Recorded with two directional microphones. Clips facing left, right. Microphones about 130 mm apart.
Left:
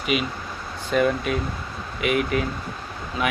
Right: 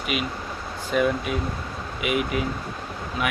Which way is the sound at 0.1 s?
5° right (ahead or behind).